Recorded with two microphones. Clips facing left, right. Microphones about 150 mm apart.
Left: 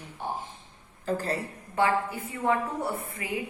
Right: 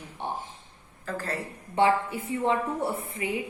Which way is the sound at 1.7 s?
25° right (ahead or behind).